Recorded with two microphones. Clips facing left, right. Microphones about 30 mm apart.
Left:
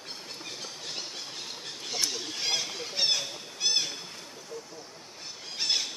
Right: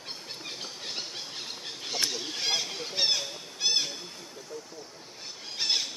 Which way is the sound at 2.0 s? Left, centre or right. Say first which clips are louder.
Right 1 dB; centre.